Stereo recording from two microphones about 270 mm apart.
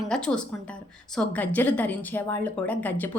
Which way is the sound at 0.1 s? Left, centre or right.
Centre.